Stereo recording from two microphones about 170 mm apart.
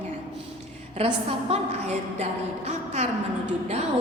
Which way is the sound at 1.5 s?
35° right (ahead or behind).